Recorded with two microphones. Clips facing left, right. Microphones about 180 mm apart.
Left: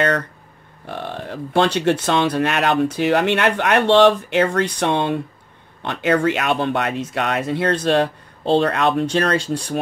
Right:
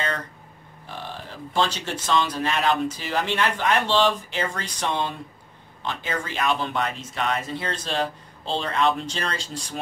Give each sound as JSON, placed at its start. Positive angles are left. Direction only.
{"t": 0.8, "sound": "speech", "side_deg": 60}